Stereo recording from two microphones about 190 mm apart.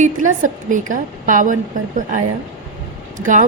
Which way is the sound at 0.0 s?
45° right (ahead or behind).